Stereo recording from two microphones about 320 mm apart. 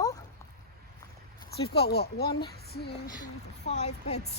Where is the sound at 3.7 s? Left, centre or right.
Left.